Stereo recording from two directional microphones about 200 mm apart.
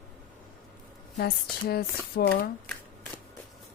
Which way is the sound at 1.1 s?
50° left (ahead or behind).